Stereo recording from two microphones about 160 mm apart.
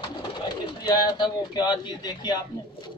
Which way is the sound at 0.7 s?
25° left (ahead or behind).